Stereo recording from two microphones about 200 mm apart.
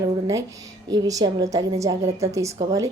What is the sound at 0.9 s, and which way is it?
A woman's voice, 15° right (ahead or behind).